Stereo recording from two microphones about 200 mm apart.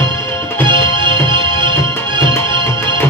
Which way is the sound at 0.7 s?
25° right (ahead or behind).